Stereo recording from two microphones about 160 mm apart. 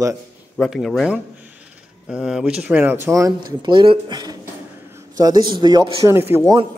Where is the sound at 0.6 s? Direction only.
Centre (ahead or behind); by 6.0 s 30° right (ahead or behind).